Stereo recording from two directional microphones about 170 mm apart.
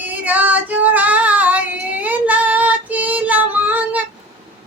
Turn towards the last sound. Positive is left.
turn(degrees=-10)  # may be behind; listen again after turning